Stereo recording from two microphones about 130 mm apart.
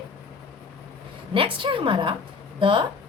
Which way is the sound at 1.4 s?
40° right (ahead or behind).